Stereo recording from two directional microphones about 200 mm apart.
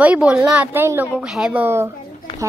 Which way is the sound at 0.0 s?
5° right (ahead or behind).